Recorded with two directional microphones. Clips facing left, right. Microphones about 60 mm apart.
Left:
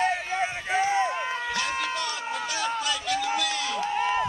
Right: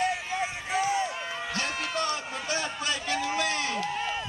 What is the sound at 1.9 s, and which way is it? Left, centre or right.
Run, right.